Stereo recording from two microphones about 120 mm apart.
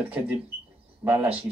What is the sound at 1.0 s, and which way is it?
Speech, 25° right (ahead or behind).